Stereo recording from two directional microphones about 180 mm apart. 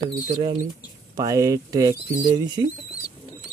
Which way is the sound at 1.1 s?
20° right (ahead or behind).